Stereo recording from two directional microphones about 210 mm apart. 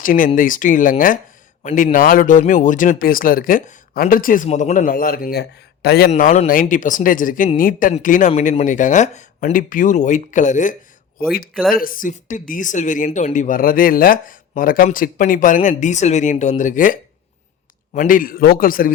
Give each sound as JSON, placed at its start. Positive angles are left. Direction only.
{"t": 0.0, "sound": "a man's voice", "side_deg": 40}
{"t": 6.1, "sound": "a man's voice", "side_deg": 35}